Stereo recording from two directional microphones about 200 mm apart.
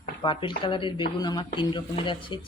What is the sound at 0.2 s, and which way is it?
Speech, 25° left (ahead or behind).